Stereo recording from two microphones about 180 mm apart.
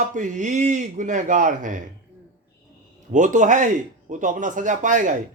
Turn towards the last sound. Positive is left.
turn(degrees=-45)  # may be behind; listen again after turning